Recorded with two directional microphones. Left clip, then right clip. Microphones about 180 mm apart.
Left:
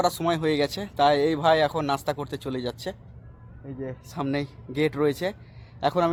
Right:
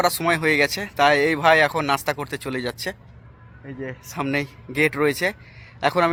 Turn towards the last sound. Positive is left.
turn(degrees=-10)  # may be behind; listen again after turning